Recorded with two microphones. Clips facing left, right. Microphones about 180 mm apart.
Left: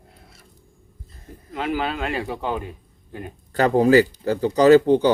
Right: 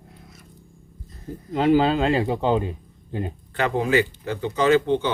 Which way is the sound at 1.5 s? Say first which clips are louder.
Right 7 dB; 30° right (ahead or behind).